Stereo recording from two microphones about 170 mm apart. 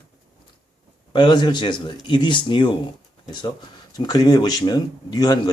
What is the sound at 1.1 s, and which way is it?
Speech, 25° left (ahead or behind).